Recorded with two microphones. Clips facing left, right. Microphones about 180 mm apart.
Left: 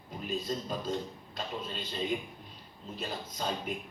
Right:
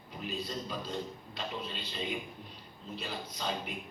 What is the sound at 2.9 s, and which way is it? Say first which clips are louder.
Speech: left 2 dB; 45° left (ahead or behind).